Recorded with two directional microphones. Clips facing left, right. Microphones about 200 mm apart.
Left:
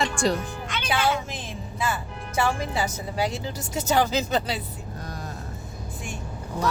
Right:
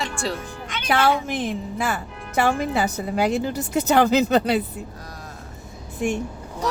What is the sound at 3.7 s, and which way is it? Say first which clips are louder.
Speech: right 5 dB; 60° right (ahead or behind).